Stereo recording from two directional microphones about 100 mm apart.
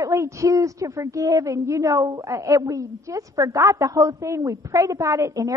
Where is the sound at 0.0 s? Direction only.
30° right (ahead or behind).